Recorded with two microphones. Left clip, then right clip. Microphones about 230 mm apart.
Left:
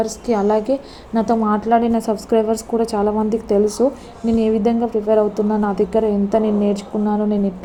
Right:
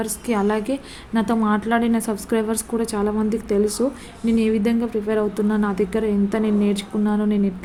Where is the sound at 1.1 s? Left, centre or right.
Right.